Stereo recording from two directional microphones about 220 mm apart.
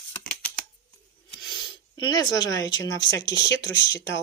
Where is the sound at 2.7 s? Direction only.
55° left (ahead or behind).